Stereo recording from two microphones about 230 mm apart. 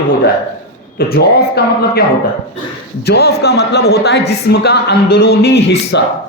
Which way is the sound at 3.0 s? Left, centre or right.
Left.